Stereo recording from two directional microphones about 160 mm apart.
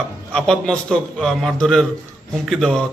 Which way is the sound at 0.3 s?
5° left (ahead or behind).